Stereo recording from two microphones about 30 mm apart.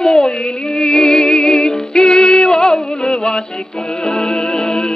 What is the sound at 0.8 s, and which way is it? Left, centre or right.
Music, left.